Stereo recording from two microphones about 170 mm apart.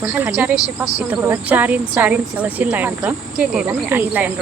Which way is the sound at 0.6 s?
20° left (ahead or behind).